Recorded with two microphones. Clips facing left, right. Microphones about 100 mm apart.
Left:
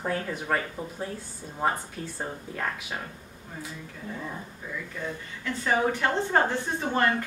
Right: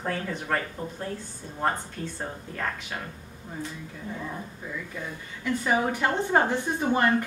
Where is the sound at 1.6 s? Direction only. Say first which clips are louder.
Even; 5° left (ahead or behind).